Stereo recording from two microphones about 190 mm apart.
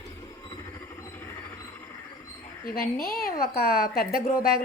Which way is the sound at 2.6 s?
55° left (ahead or behind).